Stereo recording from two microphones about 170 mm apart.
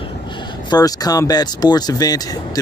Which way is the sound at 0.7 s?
20° left (ahead or behind).